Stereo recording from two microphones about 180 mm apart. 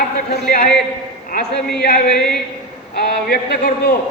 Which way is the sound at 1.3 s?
60° left (ahead or behind).